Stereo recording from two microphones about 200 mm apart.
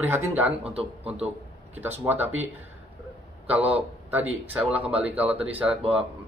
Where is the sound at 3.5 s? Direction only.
10° right (ahead or behind).